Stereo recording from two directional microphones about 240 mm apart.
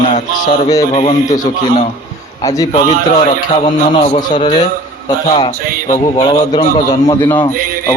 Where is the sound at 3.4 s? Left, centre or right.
Left.